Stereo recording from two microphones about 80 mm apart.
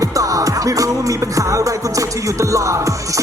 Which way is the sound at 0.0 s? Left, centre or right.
Right.